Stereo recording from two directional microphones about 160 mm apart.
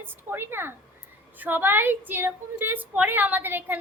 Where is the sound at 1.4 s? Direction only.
10° right (ahead or behind).